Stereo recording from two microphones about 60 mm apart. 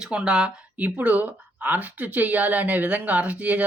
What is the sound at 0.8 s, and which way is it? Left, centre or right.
Speech, right.